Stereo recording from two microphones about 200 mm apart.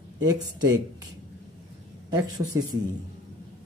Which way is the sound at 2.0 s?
20° right (ahead or behind).